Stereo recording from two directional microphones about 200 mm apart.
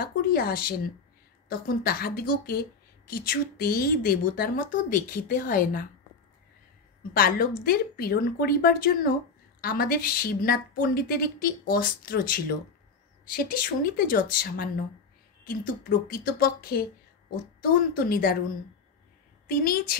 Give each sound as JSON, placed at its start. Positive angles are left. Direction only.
{"t": 0.0, "sound": "a woman's voice", "side_deg": 50}
{"t": 7.2, "sound": "a woman's voice", "side_deg": 45}
{"t": 19.4, "sound": "a woman's voice", "side_deg": 45}